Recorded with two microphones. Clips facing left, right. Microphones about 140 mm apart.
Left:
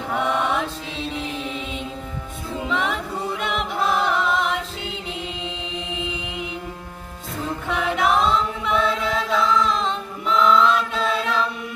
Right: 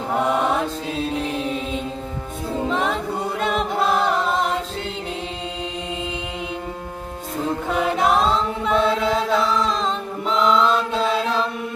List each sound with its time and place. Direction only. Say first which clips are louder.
0.1 s chant: right 2 dB; 35° right (ahead or behind)
1.5 s music: right 4 dB; 40° right (ahead or behind)
3.4 s chant: right 4 dB; 40° right (ahead or behind)
7.7 s chant: right 1 dB; 35° right (ahead or behind)
9.6 s music: right 1 dB; 35° right (ahead or behind)
10.6 s chant: right 1 dB; 30° right (ahead or behind)